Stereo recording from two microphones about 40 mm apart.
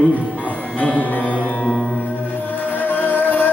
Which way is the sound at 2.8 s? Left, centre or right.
Left.